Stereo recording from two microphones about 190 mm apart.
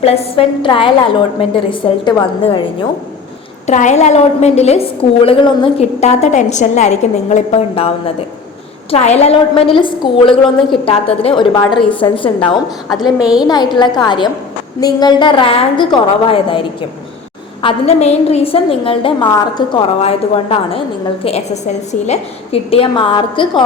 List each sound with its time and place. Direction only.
0.0 s a woman's voice: 30° left (ahead or behind)
3.7 s a woman's voice: 40° left (ahead or behind)